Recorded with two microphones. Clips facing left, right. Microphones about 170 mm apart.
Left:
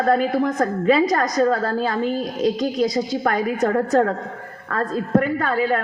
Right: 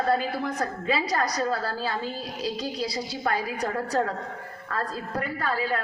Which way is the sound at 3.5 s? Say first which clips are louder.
Left 10 dB; 55° left (ahead or behind).